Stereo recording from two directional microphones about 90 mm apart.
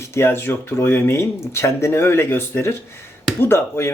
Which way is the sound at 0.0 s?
30° left (ahead or behind).